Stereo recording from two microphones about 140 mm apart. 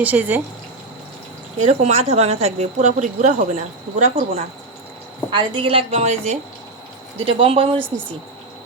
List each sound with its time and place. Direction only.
0.0 s speech: 10° right (ahead or behind)
1.5 s speech: 55° right (ahead or behind)
5.3 s a woman's voice: 35° right (ahead or behind)